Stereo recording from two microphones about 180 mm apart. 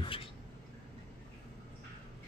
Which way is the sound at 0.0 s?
30° left (ahead or behind).